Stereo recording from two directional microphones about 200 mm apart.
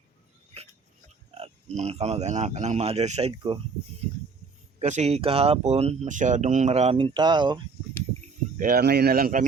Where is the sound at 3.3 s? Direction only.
20° right (ahead or behind).